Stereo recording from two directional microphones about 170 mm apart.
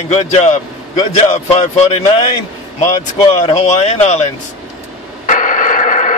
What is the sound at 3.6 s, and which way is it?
Speech, 40° left (ahead or behind).